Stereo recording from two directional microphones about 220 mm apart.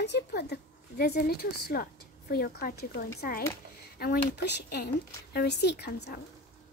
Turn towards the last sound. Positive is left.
turn(degrees=45)  # may be behind; listen again after turning